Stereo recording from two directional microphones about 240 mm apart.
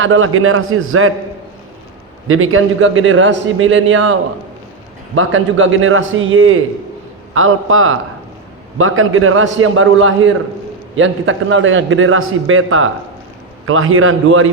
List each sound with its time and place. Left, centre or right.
0.0 s a man's voice: right
2.2 s a man's voice: right